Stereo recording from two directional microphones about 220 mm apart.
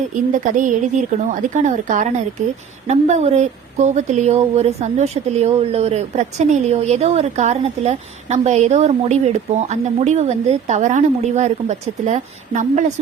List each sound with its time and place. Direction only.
0.3 s speech: 35° right (ahead or behind)